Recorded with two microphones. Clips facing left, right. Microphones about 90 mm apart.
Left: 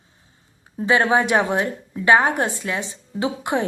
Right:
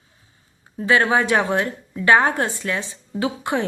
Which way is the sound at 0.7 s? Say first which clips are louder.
Even; 20° left (ahead or behind).